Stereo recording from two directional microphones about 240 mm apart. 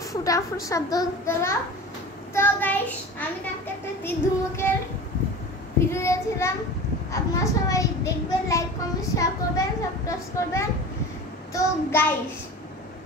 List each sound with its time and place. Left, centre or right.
0.1 s a child's voice: centre
2.3 s child singing: centre
4.6 s child singing: centre
7.1 s a child's voice: centre